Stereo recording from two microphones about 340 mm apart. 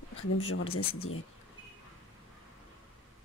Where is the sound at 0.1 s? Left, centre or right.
Left.